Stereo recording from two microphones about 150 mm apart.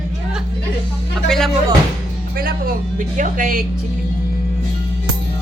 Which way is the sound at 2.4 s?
70° right (ahead or behind).